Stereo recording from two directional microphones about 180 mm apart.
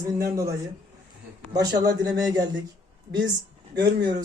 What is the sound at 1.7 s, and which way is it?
Speech, 85° right.